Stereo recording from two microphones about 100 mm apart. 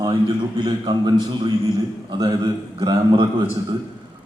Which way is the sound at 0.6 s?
45° right (ahead or behind).